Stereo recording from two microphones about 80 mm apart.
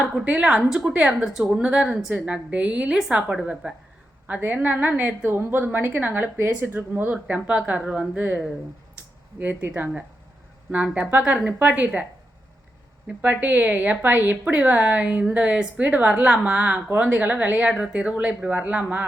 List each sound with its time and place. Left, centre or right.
0.0 s speech: centre
4.3 s a woman's voice: right
13.2 s a woman's voice: right